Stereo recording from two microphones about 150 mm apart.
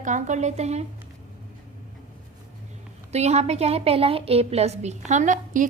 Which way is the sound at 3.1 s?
45° right (ahead or behind).